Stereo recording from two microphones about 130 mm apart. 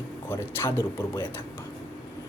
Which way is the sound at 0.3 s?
20° left (ahead or behind).